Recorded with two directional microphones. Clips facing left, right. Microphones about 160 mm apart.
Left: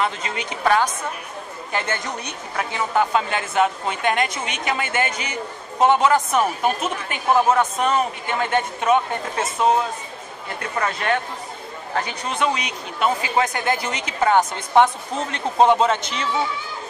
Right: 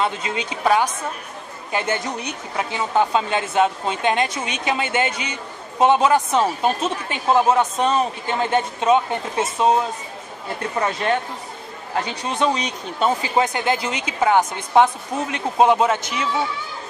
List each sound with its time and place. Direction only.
0.0 s a woman's voice: 20° right (ahead or behind)
10.8 s a woman's voice: 25° right (ahead or behind)
12.4 s speech: 35° right (ahead or behind)
13.5 s speech: 20° right (ahead or behind)